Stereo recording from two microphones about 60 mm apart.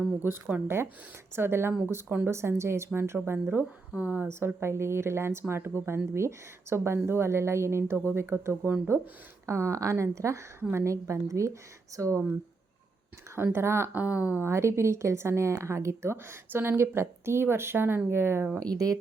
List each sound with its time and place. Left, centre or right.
0.2 s speech: right
3.9 s speech: right
4.3 s a woman's voice: right
13.3 s speech: right
13.9 s speech: right
14.4 s speech: right
18.7 s speech: right